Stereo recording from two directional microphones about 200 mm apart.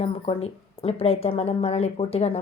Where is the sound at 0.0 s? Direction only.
30° left (ahead or behind).